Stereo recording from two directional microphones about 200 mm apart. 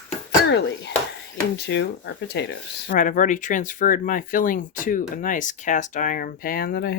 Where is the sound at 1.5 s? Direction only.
60° left (ahead or behind).